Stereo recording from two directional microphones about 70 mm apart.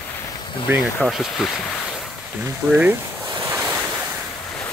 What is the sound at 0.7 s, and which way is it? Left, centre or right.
Speech, right.